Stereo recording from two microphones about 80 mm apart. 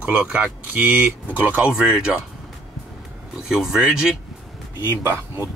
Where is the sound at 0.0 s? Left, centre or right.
Right.